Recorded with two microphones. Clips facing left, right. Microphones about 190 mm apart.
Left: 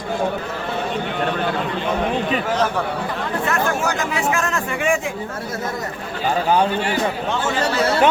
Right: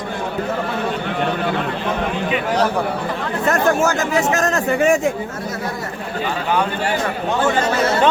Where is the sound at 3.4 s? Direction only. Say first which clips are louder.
Right 6 dB; 45° right (ahead or behind).